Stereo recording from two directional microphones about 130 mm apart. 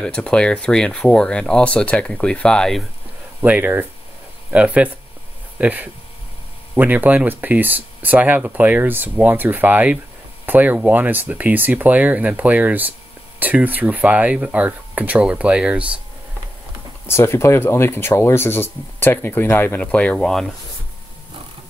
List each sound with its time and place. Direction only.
0.0 s speech: 5° left (ahead or behind)
3.4 s speech: 15° right (ahead or behind)
17.0 s speech: 20° left (ahead or behind)